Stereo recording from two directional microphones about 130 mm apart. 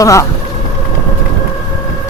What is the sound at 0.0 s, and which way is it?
Speech, 25° left (ahead or behind).